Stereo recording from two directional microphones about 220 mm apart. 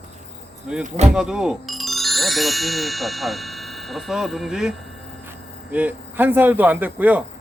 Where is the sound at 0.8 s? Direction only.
30° right (ahead or behind).